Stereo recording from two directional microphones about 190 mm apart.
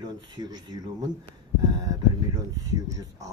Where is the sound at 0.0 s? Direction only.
20° right (ahead or behind).